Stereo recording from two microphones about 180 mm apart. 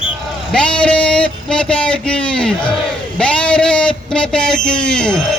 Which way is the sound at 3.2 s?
5° left (ahead or behind).